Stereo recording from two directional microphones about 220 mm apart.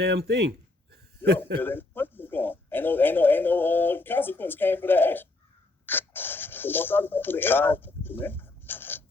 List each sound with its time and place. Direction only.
0.0 s speech: 45° right (ahead or behind)
1.5 s speech: 10° left (ahead or behind)
5.8 s a sound: 10° left (ahead or behind)
8.2 s zipper: 10° left (ahead or behind)